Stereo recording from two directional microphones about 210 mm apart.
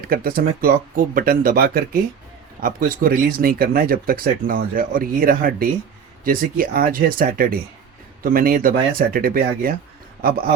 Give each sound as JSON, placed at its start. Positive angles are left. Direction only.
{"t": 0.1, "sound": "speech", "side_deg": -45}